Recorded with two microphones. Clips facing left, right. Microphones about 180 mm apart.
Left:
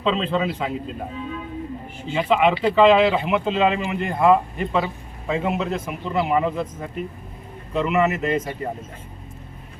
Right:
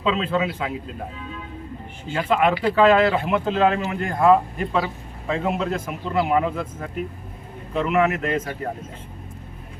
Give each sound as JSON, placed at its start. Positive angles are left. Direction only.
{"t": 0.0, "sound": "speech", "side_deg": -5}
{"t": 2.1, "sound": "speech", "side_deg": 0}
{"t": 2.6, "sound": "speech", "side_deg": 20}
{"t": 2.8, "sound": "speech", "side_deg": 0}